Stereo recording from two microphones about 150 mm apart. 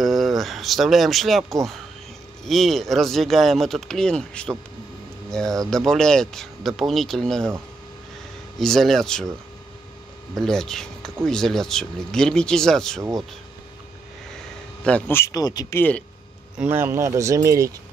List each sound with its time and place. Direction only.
0.0 s speech: centre (ahead or behind)
8.5 s speech: centre (ahead or behind)
10.3 s speech: 5° left (ahead or behind)
14.8 s speech: 10° left (ahead or behind); by 15.8 s 25° left (ahead or behind)
16.5 s speech: 15° right (ahead or behind)